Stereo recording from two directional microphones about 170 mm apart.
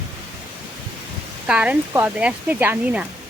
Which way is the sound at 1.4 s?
5° right (ahead or behind).